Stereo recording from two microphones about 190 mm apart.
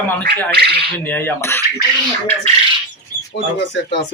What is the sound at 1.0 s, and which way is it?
Speech, 10° left (ahead or behind).